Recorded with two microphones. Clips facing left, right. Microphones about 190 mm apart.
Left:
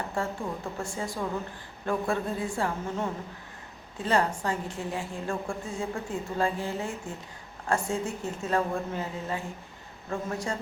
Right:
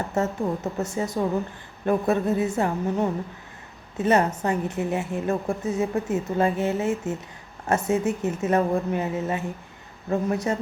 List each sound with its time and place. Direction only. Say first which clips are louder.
0.1 s a woman's voice: right 7 dB; 20° right (ahead or behind)